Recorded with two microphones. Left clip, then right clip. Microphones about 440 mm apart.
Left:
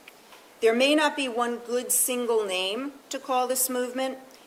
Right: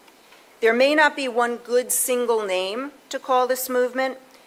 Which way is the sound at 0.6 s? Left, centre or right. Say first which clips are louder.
Right 5 dB; right.